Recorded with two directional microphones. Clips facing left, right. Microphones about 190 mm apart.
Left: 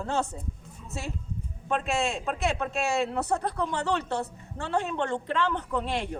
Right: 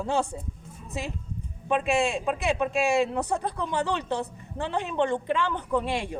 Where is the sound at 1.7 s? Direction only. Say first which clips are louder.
Right 4 dB; 10° right (ahead or behind).